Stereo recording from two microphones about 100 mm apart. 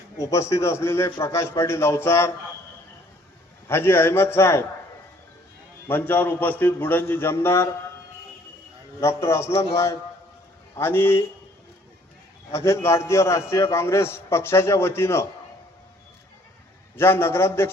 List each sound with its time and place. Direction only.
0.2 s a man's voice: 30° left (ahead or behind)
3.7 s a man's voice: 25° left (ahead or behind)
5.9 s a man's voice: 20° left (ahead or behind)
9.0 s a man's voice: 30° left (ahead or behind)
12.5 s a man's voice: 25° left (ahead or behind)
17.0 s a man's voice: 25° left (ahead or behind)